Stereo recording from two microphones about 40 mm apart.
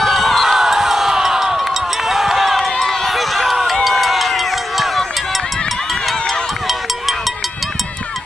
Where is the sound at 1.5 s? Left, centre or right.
Centre.